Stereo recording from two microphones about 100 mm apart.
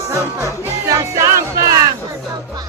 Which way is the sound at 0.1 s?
30° right (ahead or behind).